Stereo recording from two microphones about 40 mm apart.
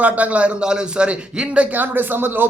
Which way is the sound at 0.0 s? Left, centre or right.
Right.